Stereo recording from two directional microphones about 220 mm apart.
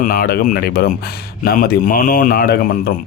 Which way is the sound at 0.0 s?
40° left (ahead or behind).